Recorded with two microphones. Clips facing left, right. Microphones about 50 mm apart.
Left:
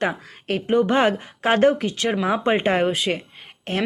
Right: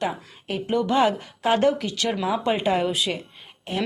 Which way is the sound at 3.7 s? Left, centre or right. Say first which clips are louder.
Left 3 dB; left.